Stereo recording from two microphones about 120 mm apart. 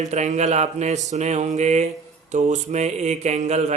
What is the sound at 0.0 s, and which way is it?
Mantra, 75° right (ahead or behind).